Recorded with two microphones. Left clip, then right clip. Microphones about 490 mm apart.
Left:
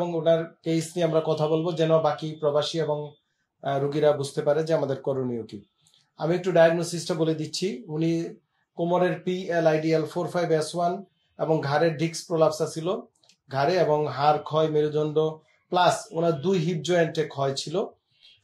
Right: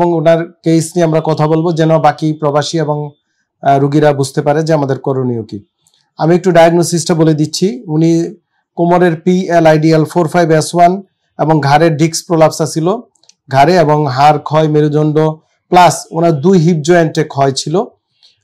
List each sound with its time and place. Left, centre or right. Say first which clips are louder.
0.1 s speech: right 13 dB; right
6.1 s speech: right 13 dB; right